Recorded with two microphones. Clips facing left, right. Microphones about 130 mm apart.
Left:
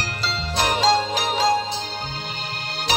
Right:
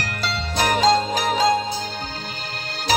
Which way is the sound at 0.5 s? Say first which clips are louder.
Right 2 dB; 45° right (ahead or behind).